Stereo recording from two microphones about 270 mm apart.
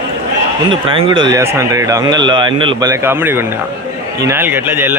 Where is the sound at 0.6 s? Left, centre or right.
Centre.